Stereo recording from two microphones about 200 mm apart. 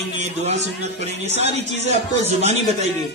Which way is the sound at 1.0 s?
35° right (ahead or behind).